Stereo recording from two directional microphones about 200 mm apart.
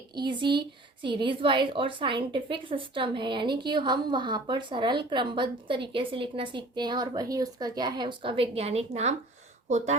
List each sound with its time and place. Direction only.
0.1 s a woman's voice: 20° right (ahead or behind)